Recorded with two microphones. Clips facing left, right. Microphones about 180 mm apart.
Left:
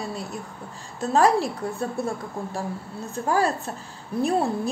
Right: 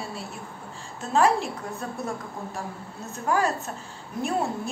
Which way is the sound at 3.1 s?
35° left (ahead or behind).